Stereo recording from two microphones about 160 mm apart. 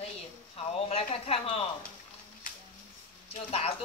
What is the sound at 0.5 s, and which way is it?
Speech, 40° left (ahead or behind).